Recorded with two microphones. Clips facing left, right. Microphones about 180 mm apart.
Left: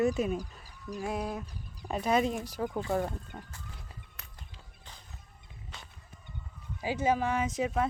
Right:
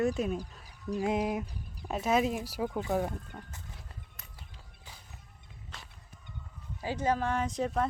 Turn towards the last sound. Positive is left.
turn(degrees=5)  # may be behind; listen again after turning